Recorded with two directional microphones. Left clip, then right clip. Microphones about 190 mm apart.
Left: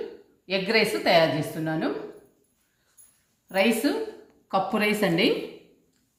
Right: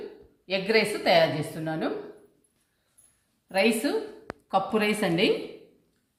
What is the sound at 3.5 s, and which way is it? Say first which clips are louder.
A woman's voice: left 1 dB; 5° right (ahead or behind).